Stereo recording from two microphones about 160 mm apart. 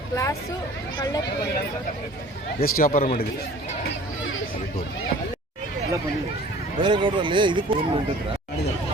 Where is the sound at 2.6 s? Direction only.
65° left (ahead or behind).